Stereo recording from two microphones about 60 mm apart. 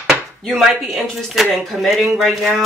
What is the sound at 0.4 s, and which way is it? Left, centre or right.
Chopping, centre.